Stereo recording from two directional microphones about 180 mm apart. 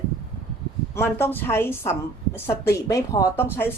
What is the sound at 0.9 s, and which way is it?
A woman's voice, 10° left (ahead or behind).